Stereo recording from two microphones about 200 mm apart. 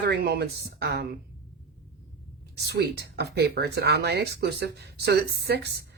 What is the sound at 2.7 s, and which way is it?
Speech, 55° right (ahead or behind).